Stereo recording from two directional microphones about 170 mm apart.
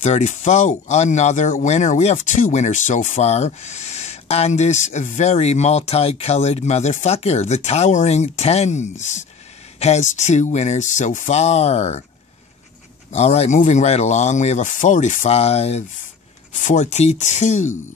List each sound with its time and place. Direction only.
0.0 s speech: 45° left (ahead or behind)
13.1 s speech: 40° left (ahead or behind)